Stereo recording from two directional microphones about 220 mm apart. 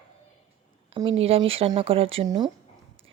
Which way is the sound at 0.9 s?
25° right (ahead or behind).